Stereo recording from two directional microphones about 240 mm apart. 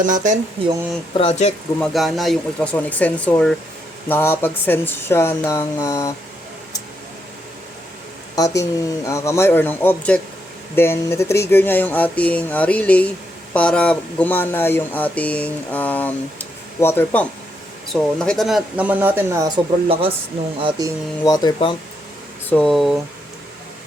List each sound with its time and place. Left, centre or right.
0.0 s speech: right
1.2 s speech: left
1.8 s speech: centre
8.5 s speech: centre
21.2 s speech: centre
22.4 s speech: centre